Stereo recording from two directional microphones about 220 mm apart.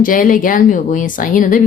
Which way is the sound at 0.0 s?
40° left (ahead or behind).